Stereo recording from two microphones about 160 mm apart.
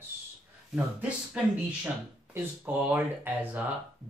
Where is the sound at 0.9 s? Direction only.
5° right (ahead or behind).